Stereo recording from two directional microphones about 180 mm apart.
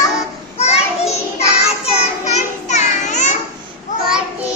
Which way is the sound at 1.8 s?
40° left (ahead or behind).